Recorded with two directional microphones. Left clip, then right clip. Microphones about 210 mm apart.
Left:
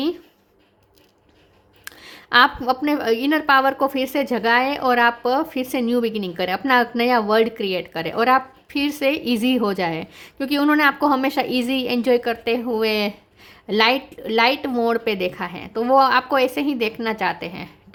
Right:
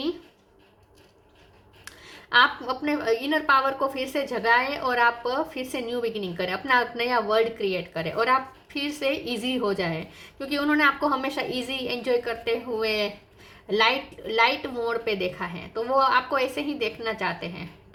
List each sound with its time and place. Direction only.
1.8 s a woman's voice: 50° left (ahead or behind)